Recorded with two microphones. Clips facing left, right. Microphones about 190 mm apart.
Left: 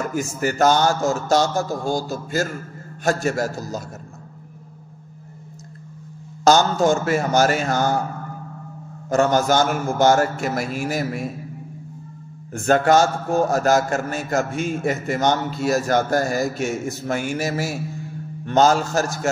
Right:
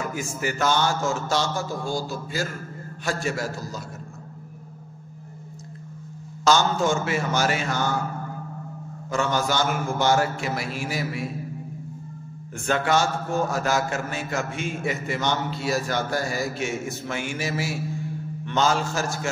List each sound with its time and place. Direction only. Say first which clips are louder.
0.0 s a man's voice: left 5 dB; 45° left (ahead or behind)
6.4 s a man's voice: left 5 dB; 40° left (ahead or behind)
9.1 s a man's voice: left 7 dB; 45° left (ahead or behind)
12.5 s a man's voice: left 7 dB; 45° left (ahead or behind)